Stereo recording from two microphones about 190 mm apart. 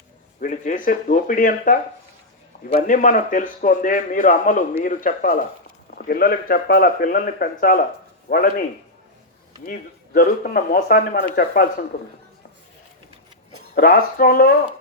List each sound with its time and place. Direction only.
0.3 s a man's voice: 40° left (ahead or behind)
10.2 s a man's voice: 50° left (ahead or behind)
13.7 s a man's voice: 50° left (ahead or behind)